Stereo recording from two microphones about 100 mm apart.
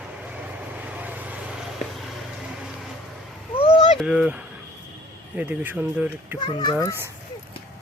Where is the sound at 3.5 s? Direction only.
70° left (ahead or behind).